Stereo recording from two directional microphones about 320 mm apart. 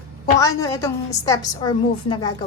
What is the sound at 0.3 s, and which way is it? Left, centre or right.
A woman's voice, centre.